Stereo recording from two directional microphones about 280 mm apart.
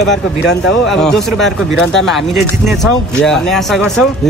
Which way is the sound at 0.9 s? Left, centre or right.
Centre.